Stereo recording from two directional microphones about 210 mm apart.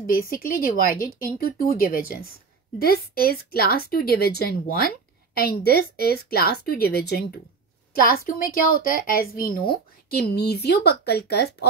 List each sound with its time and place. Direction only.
0.0 s speech: 45° left (ahead or behind)